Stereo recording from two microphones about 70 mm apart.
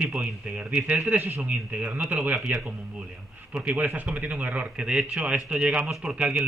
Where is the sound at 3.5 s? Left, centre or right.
Centre.